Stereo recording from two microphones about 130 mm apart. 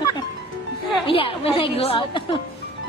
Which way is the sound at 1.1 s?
45° left (ahead or behind).